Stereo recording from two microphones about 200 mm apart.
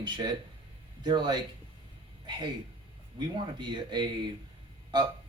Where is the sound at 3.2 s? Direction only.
25° right (ahead or behind).